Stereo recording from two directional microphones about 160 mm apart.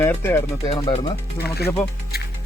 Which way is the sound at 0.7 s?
40° left (ahead or behind).